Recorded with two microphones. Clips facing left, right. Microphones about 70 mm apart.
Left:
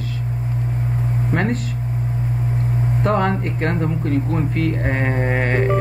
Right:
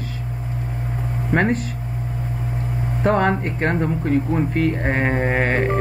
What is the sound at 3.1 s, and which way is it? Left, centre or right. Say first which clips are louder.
Speech: right 2 dB; right.